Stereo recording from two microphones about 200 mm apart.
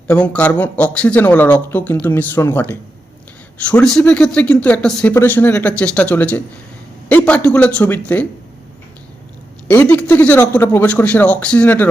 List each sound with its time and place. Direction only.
0.1 s speech: 5° left (ahead or behind)
9.6 s speech: 10° left (ahead or behind)